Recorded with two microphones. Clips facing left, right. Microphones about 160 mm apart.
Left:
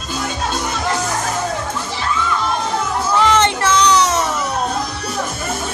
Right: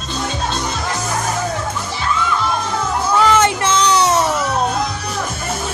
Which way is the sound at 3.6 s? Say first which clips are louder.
Left 1 dB; 25° right (ahead or behind).